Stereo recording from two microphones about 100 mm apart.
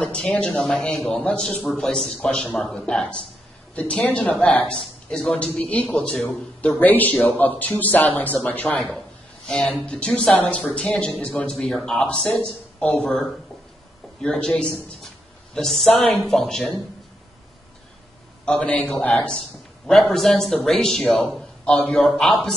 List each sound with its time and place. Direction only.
0.0 s a man's voice: 10° left (ahead or behind)
6.8 s a man's voice: 15° left (ahead or behind); by 16.8 s centre (ahead or behind)
18.4 s speech: 10° left (ahead or behind)
19.9 s a man's voice: centre (ahead or behind)
22.0 s a man's voice: centre (ahead or behind)